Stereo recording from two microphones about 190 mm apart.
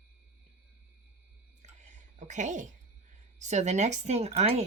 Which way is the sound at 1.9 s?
40° right (ahead or behind).